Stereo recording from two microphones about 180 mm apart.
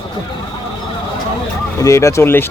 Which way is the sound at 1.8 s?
15° left (ahead or behind).